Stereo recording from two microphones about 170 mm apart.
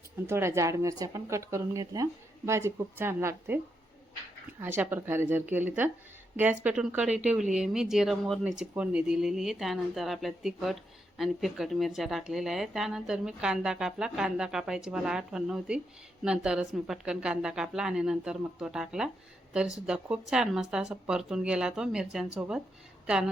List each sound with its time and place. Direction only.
0.3 s speech: 15° right (ahead or behind)
4.6 s speech: 10° right (ahead or behind)